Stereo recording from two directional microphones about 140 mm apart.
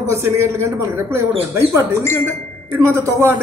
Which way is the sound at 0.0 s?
20° right (ahead or behind).